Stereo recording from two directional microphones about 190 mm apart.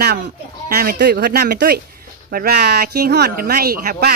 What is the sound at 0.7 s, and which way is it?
Speech, 55° right (ahead or behind).